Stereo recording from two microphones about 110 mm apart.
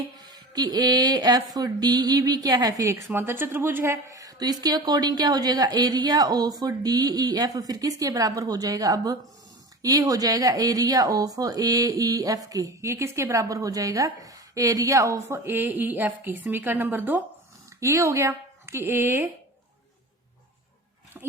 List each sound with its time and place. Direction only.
0.2 s speech: 40° right (ahead or behind)
3.1 s a woman's voice: 20° right (ahead or behind)
4.1 s speech: 30° right (ahead or behind)
15.4 s a woman's voice: 15° right (ahead or behind)